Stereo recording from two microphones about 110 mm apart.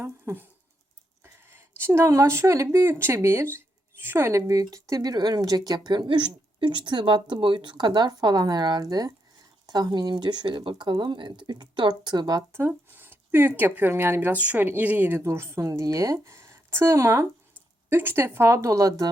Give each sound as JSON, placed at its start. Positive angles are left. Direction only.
{"t": 0.0, "sound": "speech", "side_deg": -20}
{"t": 1.2, "sound": "a sound", "side_deg": -20}
{"t": 2.7, "sound": "speech", "side_deg": -25}
{"t": 12.5, "sound": "speech", "side_deg": -20}